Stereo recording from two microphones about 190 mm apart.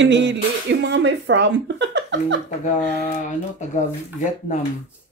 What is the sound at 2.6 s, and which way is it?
Speech, 40° left (ahead or behind).